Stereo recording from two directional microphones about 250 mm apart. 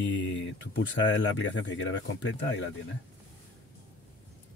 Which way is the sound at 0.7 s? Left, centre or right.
Left.